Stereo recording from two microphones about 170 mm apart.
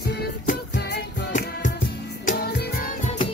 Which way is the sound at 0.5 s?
70° left (ahead or behind).